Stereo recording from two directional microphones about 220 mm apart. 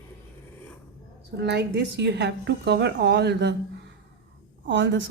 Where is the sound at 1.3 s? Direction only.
50° right (ahead or behind).